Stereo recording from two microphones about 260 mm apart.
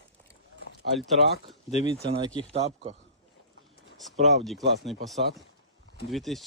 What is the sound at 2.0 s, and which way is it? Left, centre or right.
Speech, centre.